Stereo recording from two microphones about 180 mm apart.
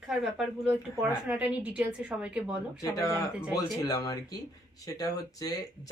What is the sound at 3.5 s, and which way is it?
Speech, 20° left (ahead or behind).